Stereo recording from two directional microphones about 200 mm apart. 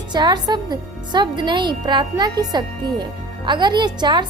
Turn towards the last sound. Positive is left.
turn(degrees=-20)  # may be behind; listen again after turning